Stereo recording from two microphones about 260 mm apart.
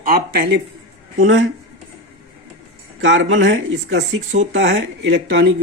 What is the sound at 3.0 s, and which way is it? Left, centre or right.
Speech, right.